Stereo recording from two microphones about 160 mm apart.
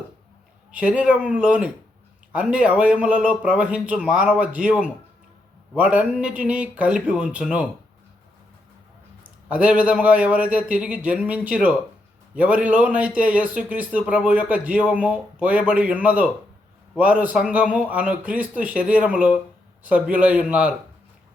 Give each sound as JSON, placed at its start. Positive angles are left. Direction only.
{"t": 0.7, "sound": "a man's voice", "side_deg": -10}
{"t": 9.5, "sound": "a man's voice", "side_deg": -10}